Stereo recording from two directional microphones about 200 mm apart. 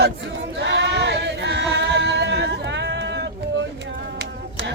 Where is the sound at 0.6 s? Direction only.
60° right (ahead or behind).